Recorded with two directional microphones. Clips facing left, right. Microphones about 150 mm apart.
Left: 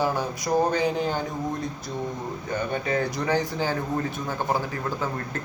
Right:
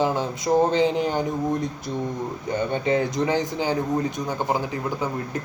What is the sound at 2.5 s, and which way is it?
A man's voice, 25° right (ahead or behind).